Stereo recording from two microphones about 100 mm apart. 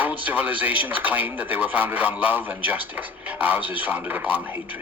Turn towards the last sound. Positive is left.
turn(degrees=-20)  # may be behind; listen again after turning